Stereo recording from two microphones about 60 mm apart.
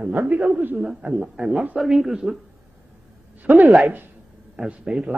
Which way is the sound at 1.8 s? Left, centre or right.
Centre.